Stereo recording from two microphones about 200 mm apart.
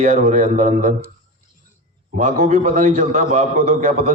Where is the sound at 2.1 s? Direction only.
40° right (ahead or behind).